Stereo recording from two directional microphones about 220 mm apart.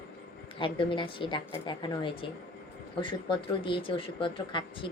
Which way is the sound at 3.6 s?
25° left (ahead or behind).